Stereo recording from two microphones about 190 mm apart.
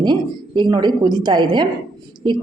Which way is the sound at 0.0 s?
25° right (ahead or behind).